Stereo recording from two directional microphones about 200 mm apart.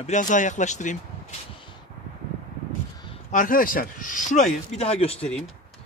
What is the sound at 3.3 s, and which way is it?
Speech, 40° left (ahead or behind).